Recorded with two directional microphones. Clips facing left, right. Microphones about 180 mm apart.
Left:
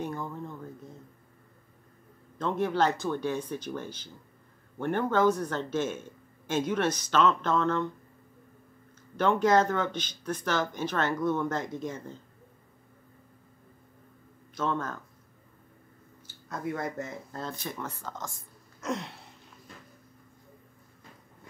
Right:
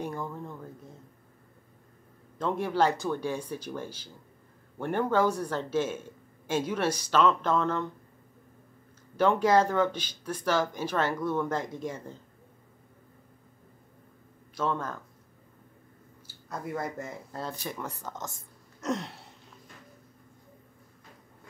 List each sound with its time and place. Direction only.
0.0 s a sound: 10° right (ahead or behind)
2.3 s speech: 10° right (ahead or behind)
9.1 s speech: 10° right (ahead or behind)
14.5 s speech: 10° right (ahead or behind)
16.3 s speech: 10° right (ahead or behind)
18.8 s a sound: 40° right (ahead or behind)